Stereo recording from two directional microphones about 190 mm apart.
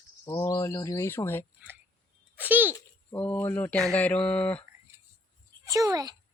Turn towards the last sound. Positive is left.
turn(degrees=-20)  # may be behind; listen again after turning